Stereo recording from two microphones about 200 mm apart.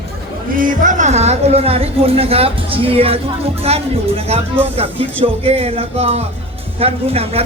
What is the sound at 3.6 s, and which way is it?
Speech, 30° right (ahead or behind).